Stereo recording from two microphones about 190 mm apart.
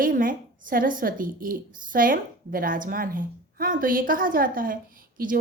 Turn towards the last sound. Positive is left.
turn(degrees=-50)  # may be behind; listen again after turning